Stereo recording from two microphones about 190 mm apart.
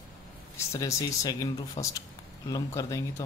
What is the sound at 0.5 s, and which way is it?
Speech, 15° left (ahead or behind).